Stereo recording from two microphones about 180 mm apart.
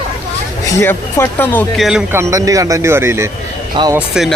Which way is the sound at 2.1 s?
15° right (ahead or behind).